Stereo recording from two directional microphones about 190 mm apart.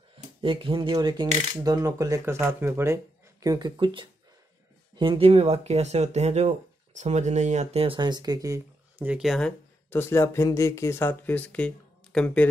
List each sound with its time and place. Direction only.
0.4 s speech: 25° right (ahead or behind); by 12.4 s 5° left (ahead or behind)